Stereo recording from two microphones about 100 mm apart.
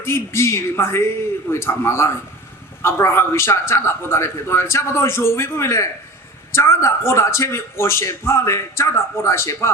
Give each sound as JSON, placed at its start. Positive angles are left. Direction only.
{"t": 0.0, "sound": "a man's voice", "side_deg": 25}